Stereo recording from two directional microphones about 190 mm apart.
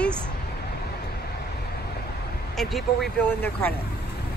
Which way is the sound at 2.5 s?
Centre (ahead or behind).